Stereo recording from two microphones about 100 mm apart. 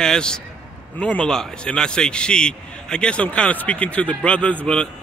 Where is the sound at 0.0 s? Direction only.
5° left (ahead or behind).